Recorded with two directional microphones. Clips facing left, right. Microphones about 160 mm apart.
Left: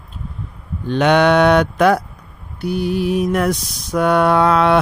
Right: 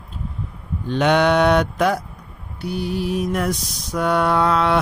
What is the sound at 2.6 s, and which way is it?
Mantra, 55° left (ahead or behind).